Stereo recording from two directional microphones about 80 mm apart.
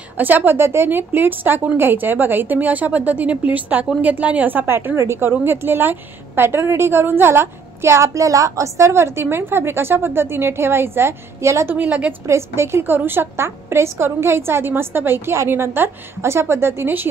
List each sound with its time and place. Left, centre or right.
0.2 s a woman's voice: right
11.7 s speech: centre
12.3 s a woman's voice: right